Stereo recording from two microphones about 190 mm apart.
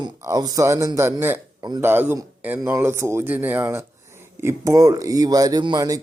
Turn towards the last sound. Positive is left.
turn(degrees=-20)  # may be behind; listen again after turning